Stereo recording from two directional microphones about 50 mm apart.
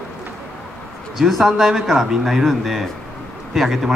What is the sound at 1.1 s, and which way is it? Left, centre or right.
Speech, centre.